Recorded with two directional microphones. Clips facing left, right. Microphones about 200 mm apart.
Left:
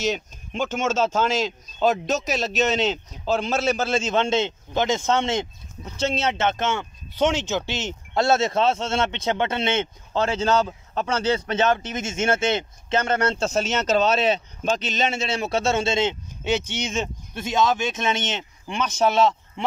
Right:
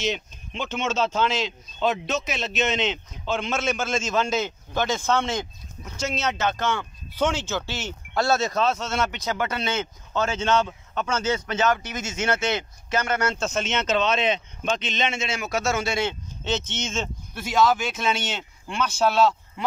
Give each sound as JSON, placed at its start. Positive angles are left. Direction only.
{"t": 0.0, "sound": "speech", "side_deg": 45}